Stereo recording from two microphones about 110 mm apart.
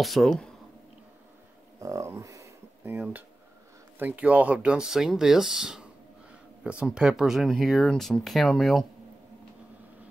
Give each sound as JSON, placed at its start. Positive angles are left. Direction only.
{"t": 0.0, "sound": "speech", "side_deg": 5}
{"t": 1.8, "sound": "a sound", "side_deg": -25}
{"t": 3.0, "sound": "speech", "side_deg": -15}